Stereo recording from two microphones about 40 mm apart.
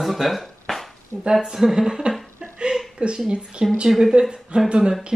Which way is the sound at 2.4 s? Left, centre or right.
Right.